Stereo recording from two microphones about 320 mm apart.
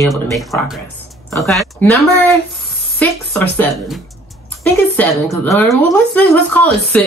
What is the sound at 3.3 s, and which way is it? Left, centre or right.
Speech, centre.